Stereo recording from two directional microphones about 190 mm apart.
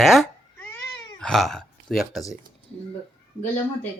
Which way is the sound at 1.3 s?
Centre (ahead or behind).